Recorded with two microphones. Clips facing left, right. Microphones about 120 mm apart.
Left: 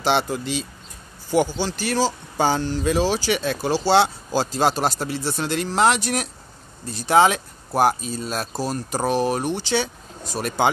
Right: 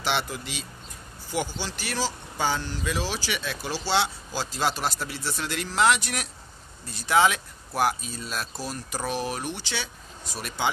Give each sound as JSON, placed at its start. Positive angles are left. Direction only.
{"t": 0.0, "sound": "speech", "side_deg": 35}
{"t": 10.3, "sound": "speech", "side_deg": 45}